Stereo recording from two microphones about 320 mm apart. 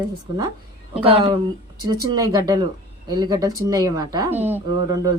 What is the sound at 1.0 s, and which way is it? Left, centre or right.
Speech, centre.